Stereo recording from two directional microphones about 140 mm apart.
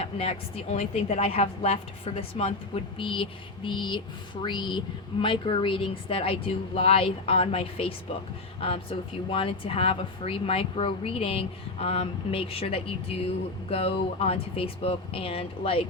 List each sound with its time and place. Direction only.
0.0 s a woman's voice: 45° left (ahead or behind)